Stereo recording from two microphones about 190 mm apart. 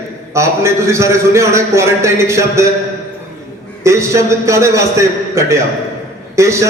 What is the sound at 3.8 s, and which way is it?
A man's voice, 15° right (ahead or behind).